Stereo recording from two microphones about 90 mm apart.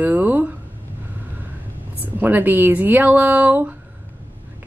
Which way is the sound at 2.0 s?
20° right (ahead or behind).